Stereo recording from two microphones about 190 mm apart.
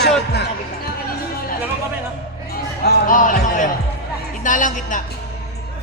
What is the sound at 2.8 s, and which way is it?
Speech, 45° left (ahead or behind).